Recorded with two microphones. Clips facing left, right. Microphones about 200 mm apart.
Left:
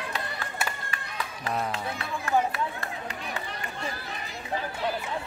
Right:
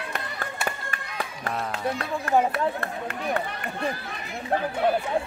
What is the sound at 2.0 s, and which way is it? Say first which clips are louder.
Run: right 3 dB; 55° right (ahead or behind).